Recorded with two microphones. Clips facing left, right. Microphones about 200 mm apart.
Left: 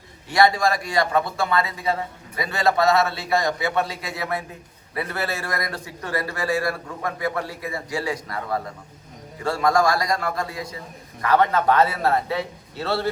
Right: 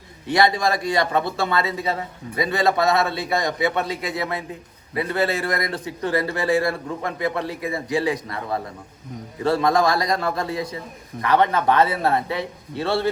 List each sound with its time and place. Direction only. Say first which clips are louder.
0.3 s a man's voice: even; 20° right (ahead or behind)